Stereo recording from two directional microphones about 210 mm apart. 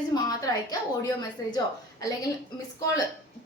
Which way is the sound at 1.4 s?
15° left (ahead or behind).